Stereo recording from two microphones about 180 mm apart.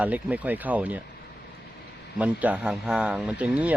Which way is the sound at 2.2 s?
10° right (ahead or behind).